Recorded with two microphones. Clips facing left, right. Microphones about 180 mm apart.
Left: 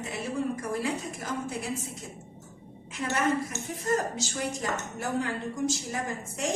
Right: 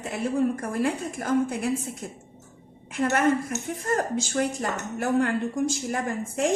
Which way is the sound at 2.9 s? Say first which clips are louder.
Right 5 dB; 55° right (ahead or behind).